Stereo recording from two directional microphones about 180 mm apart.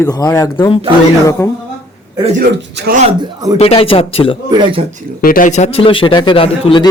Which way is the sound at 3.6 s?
35° left (ahead or behind).